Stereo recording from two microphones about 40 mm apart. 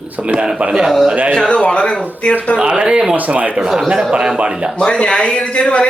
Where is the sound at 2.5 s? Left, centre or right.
Right.